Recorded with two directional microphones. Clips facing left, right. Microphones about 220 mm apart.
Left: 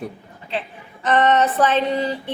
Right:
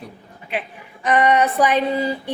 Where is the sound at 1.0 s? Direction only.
10° right (ahead or behind).